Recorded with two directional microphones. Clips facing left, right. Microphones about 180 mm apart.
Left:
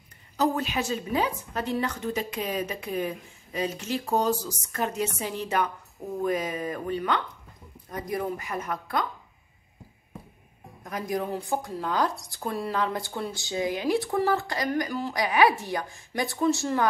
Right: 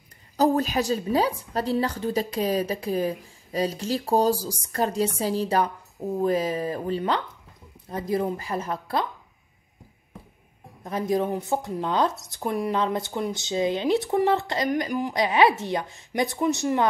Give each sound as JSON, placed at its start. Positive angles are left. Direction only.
{"t": 0.4, "sound": "a woman's voice", "side_deg": -40}
{"t": 10.8, "sound": "speech", "side_deg": -25}